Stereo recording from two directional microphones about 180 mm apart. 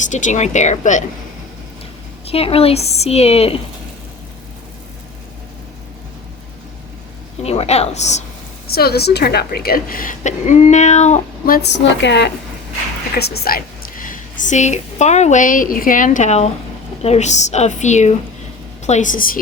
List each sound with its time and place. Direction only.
0.1 s a woman's voice: 40° left (ahead or behind)
2.2 s a woman's voice: 30° left (ahead or behind)
7.4 s a woman's voice: 35° left (ahead or behind)
8.7 s a woman's voice: 60° left (ahead or behind); by 11.5 s 40° left (ahead or behind)
11.5 s speech: 70° left (ahead or behind)
13.1 s a woman's voice: 55° left (ahead or behind)